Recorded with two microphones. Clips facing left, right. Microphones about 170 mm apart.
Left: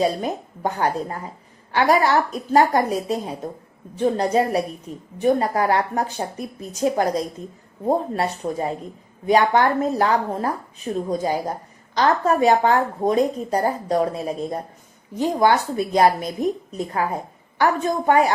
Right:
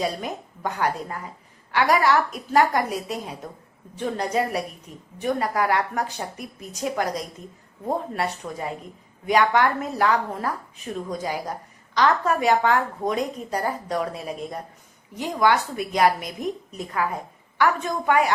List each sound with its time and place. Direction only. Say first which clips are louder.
0.0 s a woman's voice: left 6 dB; 30° left (ahead or behind)